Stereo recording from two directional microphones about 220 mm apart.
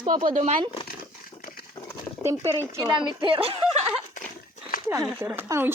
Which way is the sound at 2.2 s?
10° right (ahead or behind).